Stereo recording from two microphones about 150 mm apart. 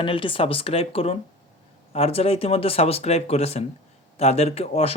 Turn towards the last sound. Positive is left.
turn(degrees=45)  # may be behind; listen again after turning